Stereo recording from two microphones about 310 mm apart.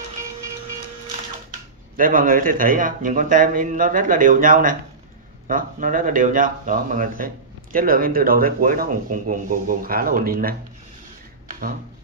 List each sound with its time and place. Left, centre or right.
2.0 s speech: right